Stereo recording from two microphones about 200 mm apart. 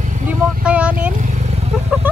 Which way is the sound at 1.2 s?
35° right (ahead or behind).